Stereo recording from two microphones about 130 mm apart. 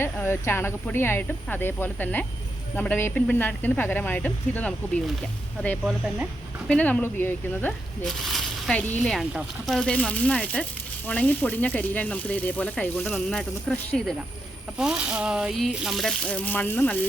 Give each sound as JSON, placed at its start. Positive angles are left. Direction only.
{"t": 0.0, "sound": "speech", "side_deg": 20}
{"t": 6.7, "sound": "speech", "side_deg": 10}
{"t": 8.0, "sound": "speech", "side_deg": 0}